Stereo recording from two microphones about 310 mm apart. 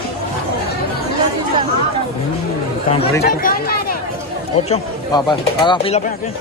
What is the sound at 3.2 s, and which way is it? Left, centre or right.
Chatter, left.